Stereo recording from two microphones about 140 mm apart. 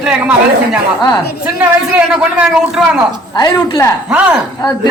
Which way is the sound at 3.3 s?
30° left (ahead or behind).